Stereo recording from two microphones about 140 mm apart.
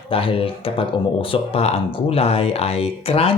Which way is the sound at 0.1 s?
40° left (ahead or behind).